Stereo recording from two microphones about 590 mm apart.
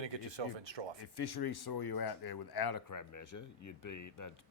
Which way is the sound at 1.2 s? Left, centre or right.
Left.